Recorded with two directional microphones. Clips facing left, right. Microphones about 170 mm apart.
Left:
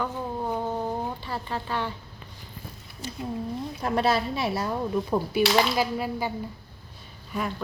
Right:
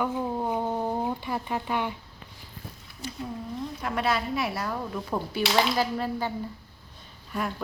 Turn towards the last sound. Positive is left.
turn(degrees=0)  # may be behind; listen again after turning